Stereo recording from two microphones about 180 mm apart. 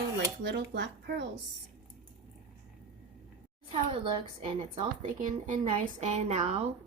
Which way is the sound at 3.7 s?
30° right (ahead or behind).